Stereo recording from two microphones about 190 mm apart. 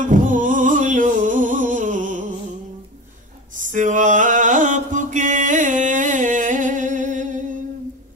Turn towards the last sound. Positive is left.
turn(degrees=-40)  # may be behind; listen again after turning